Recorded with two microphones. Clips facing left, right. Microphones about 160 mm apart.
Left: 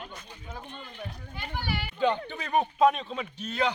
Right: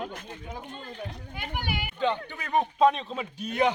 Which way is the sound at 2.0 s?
15° left (ahead or behind).